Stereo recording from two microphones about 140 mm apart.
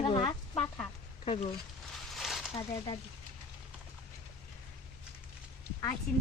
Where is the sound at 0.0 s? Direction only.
35° left (ahead or behind).